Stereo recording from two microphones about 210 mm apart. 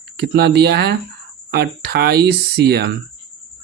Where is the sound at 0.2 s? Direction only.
55° right (ahead or behind).